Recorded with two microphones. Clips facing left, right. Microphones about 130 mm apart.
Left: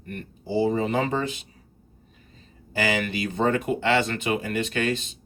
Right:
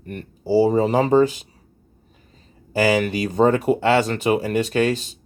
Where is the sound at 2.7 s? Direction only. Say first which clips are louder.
Right 7 dB; 40° right (ahead or behind).